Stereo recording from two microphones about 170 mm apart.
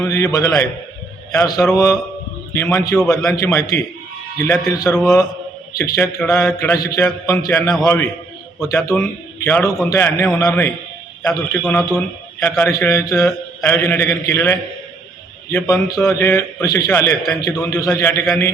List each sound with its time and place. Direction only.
0.0 s a man's voice: 20° left (ahead or behind)
11.6 s speech: centre (ahead or behind)
11.9 s a man's voice: 15° left (ahead or behind)